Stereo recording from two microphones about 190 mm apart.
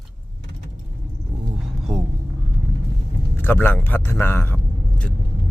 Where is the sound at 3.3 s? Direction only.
10° left (ahead or behind).